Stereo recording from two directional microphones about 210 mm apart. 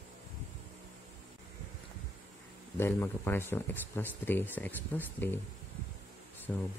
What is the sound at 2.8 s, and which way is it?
Speech, 10° left (ahead or behind).